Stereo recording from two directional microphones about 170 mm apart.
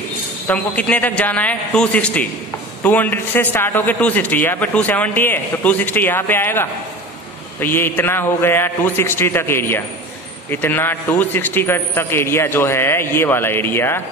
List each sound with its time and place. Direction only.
0.5 s a man's voice: 10° left (ahead or behind)